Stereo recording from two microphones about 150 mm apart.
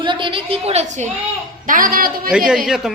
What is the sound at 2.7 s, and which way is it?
Speech, 5° right (ahead or behind).